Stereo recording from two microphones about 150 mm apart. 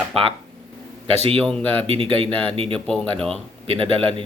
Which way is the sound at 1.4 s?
10° left (ahead or behind).